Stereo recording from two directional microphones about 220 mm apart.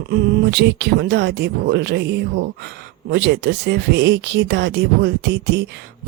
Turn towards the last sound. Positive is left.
turn(degrees=-50)  # may be behind; listen again after turning